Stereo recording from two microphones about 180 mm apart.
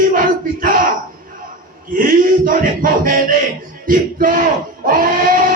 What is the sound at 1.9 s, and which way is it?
Speech, 50° right (ahead or behind).